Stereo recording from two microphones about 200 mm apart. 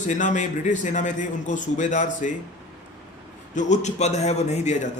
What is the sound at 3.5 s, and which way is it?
A man's voice, 35° left (ahead or behind).